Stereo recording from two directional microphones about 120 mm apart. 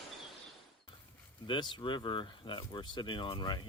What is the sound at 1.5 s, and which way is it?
Speech, 40° left (ahead or behind).